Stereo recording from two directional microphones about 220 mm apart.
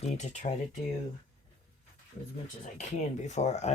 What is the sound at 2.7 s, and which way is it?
Speech, 35° left (ahead or behind).